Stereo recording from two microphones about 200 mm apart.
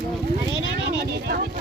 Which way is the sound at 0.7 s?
55° right (ahead or behind).